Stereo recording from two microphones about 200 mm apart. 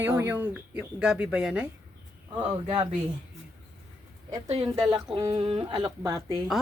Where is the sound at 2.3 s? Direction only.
25° right (ahead or behind).